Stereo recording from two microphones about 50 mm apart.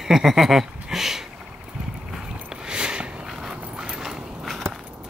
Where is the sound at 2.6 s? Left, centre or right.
Centre.